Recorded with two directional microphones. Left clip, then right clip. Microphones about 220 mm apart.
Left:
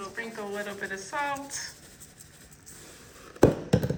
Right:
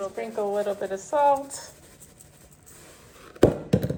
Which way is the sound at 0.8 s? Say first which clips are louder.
Right 11 dB; 45° right (ahead or behind).